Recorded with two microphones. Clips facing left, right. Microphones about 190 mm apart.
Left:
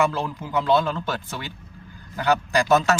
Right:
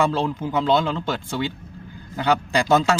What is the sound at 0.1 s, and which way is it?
Speech, 25° right (ahead or behind).